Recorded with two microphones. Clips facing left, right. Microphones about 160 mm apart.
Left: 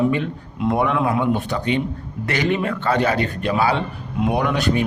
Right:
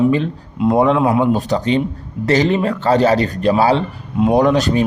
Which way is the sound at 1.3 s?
40° right (ahead or behind).